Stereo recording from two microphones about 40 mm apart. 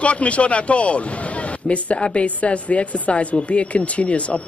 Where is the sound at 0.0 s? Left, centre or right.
Left.